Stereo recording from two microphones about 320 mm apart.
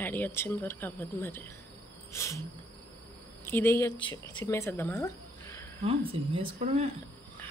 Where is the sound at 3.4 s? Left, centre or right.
Centre.